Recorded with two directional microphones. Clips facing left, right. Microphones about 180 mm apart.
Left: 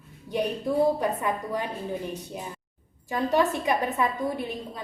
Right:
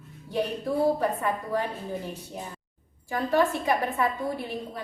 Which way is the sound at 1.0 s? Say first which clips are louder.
Even; 15° left (ahead or behind).